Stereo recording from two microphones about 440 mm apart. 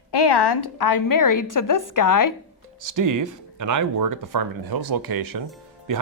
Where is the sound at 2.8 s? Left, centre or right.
Right.